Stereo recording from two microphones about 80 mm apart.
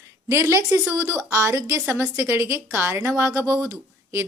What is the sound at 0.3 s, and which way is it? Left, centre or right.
A woman's voice, right.